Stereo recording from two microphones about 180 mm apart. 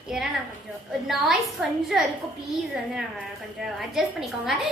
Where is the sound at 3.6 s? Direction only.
Centre (ahead or behind).